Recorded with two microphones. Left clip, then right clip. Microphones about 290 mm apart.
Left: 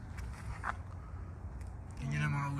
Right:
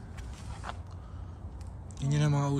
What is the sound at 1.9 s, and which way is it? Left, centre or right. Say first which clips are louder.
Speech: right 6 dB; centre.